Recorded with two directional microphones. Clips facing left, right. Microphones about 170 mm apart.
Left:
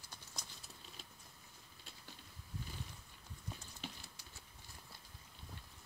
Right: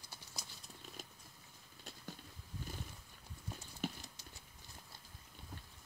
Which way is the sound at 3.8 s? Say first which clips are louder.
Right 8 dB; 45° right (ahead or behind).